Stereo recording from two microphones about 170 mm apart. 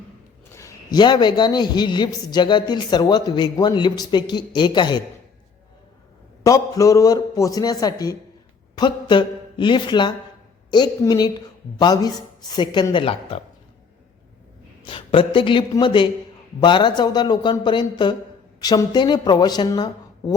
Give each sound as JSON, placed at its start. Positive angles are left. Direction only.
{"t": 0.5, "sound": "a man's voice", "side_deg": 20}
{"t": 6.4, "sound": "a man's voice", "side_deg": 20}
{"t": 14.8, "sound": "a man's voice", "side_deg": 30}